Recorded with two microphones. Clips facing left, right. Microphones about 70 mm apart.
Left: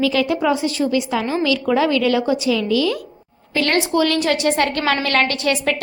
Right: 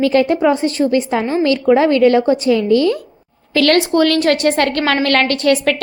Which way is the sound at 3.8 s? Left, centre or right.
Right.